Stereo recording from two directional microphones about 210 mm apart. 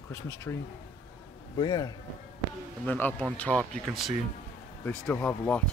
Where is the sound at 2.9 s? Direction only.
5° left (ahead or behind).